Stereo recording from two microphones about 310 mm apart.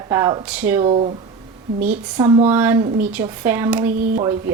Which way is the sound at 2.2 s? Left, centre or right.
Centre.